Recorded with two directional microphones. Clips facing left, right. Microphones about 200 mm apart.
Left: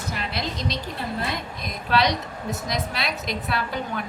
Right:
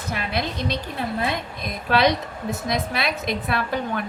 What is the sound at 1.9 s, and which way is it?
Speech, 55° right (ahead or behind).